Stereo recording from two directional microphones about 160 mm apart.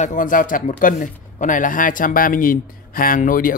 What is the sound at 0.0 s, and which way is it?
Speech, 55° left (ahead or behind).